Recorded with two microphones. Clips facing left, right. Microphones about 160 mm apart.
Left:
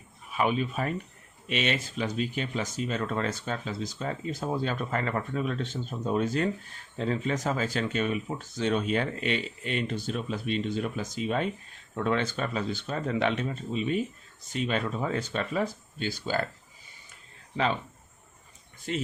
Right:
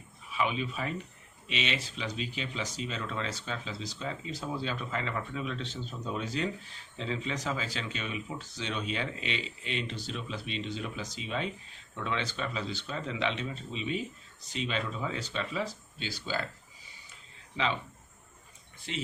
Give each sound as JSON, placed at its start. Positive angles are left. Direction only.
{"t": 0.3, "sound": "speech", "side_deg": 50}
{"t": 18.9, "sound": "speech", "side_deg": 45}